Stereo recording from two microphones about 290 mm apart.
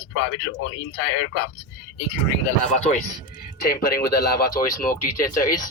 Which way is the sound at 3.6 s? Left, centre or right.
Left.